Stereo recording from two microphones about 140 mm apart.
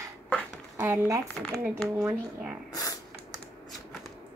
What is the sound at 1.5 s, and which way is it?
Speech, 10° right (ahead or behind).